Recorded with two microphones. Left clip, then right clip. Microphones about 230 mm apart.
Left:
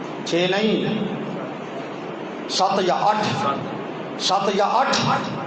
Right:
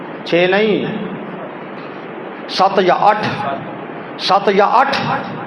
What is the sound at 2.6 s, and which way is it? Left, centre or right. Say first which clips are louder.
Speech: right 7 dB; right.